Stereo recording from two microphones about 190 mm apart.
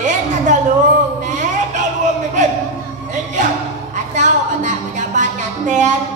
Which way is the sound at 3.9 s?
40° right (ahead or behind).